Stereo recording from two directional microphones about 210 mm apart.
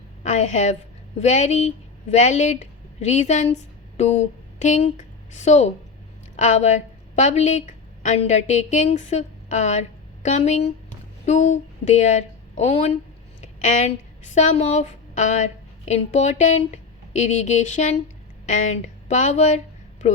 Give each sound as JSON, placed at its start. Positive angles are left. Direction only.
{"t": 0.2, "sound": "a woman's voice", "side_deg": 35}